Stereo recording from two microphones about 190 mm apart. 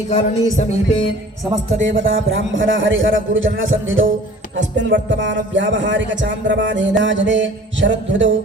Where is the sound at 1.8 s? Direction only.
80° right.